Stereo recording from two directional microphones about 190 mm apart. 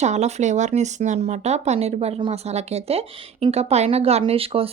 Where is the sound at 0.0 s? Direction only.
35° right (ahead or behind).